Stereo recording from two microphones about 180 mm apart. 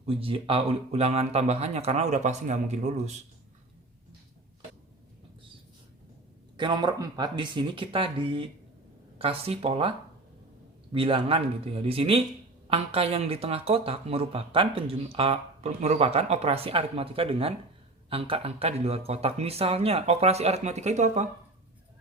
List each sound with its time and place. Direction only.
0.0 s speech: 30° right (ahead or behind)
6.6 s speech: 25° right (ahead or behind)
10.9 s speech: 30° right (ahead or behind)